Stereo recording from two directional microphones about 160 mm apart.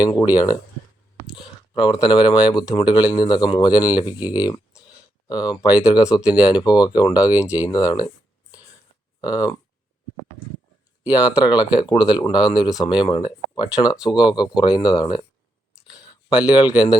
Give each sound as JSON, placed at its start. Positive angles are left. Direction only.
{"t": 0.0, "sound": "speech", "side_deg": 25}
{"t": 1.4, "sound": "a sound", "side_deg": 30}
{"t": 2.5, "sound": "speech", "side_deg": 25}
{"t": 4.2, "sound": "speech", "side_deg": -10}
{"t": 4.4, "sound": "speech", "side_deg": 25}
{"t": 5.6, "sound": "speech", "side_deg": -10}
{"t": 6.6, "sound": "speech", "side_deg": 25}
{"t": 7.2, "sound": "speech", "side_deg": -10}
{"t": 7.9, "sound": "speech", "side_deg": 20}
{"t": 9.2, "sound": "speech", "side_deg": 25}
{"t": 11.0, "sound": "speech", "side_deg": -10}
{"t": 11.8, "sound": "speech", "side_deg": 25}
{"t": 15.9, "sound": "a sound", "side_deg": -10}